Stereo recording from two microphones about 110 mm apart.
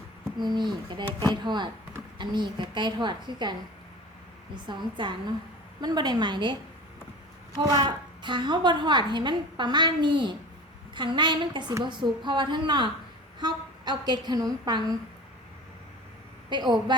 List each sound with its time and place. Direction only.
0.3 s a woman's voice: 40° right (ahead or behind)
4.5 s a woman's voice: 45° right (ahead or behind)
7.6 s a woman's voice: 35° right (ahead or behind)
16.5 s a woman's voice: 40° right (ahead or behind)